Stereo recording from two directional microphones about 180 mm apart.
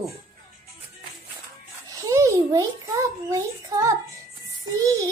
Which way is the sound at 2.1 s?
15° right (ahead or behind).